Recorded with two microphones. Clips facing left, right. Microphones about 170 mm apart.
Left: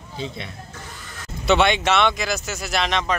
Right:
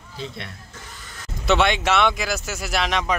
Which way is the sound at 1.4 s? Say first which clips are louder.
Left 1 dB; centre (ahead or behind).